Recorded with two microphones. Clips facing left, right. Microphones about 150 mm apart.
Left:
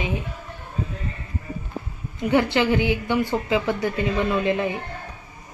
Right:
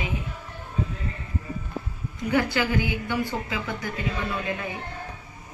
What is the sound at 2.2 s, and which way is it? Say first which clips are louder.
A woman's voice: left 5 dB; 25° left (ahead or behind).